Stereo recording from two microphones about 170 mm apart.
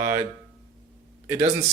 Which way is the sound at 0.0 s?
15° right (ahead or behind).